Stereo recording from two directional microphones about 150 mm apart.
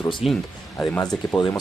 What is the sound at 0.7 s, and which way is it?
Speech, 15° left (ahead or behind).